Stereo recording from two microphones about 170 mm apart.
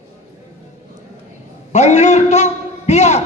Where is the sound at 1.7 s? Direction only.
45° left (ahead or behind).